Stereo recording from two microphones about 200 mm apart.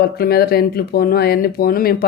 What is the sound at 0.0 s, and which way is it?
Speech, 50° left (ahead or behind).